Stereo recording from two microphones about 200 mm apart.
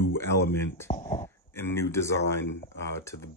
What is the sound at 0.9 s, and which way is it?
Speech, 30° left (ahead or behind).